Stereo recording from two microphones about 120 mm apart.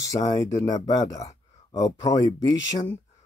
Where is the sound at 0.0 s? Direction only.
35° left (ahead or behind).